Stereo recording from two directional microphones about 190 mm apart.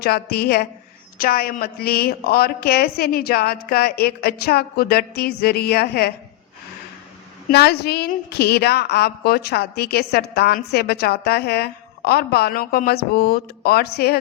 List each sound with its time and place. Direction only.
0.0 s a woman's voice: 55° left (ahead or behind)
7.5 s a woman's voice: 60° left (ahead or behind)